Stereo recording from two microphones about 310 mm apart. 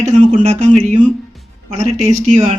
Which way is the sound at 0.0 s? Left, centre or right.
Right.